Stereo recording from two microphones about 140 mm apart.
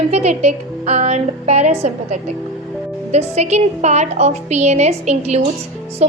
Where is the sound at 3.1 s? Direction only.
50° right (ahead or behind).